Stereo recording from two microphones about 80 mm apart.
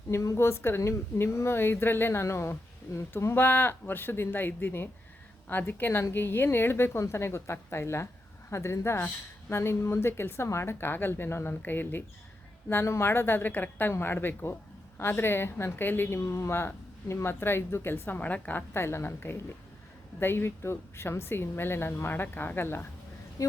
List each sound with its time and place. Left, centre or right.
0.1 s a woman's voice: left
23.4 s speech: left